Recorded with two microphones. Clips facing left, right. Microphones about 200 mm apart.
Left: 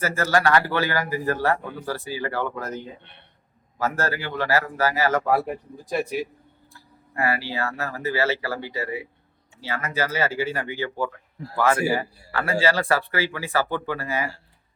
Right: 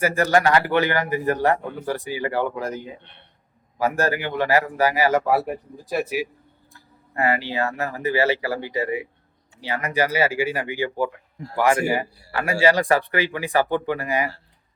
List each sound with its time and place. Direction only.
0.0 s a man's voice: 15° right (ahead or behind)
7.2 s a man's voice: 20° right (ahead or behind)